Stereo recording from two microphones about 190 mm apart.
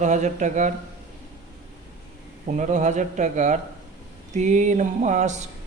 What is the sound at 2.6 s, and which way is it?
Speech, 40° right (ahead or behind).